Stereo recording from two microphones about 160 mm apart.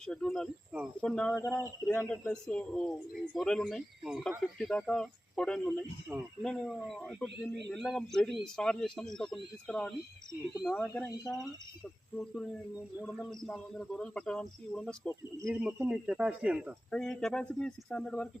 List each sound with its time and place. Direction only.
0.0 s speech: 5° left (ahead or behind)
1.3 s speech: 20° left (ahead or behind)
1.9 s speech: 5° left (ahead or behind)
12.1 s speech: 5° left (ahead or behind)
15.4 s speech: 5° right (ahead or behind)
16.9 s speech: 5° left (ahead or behind)